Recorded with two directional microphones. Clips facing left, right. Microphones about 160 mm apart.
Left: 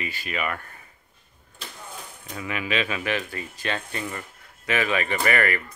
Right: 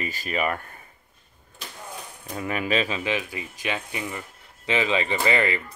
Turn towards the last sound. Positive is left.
turn(degrees=-20)  # may be behind; listen again after turning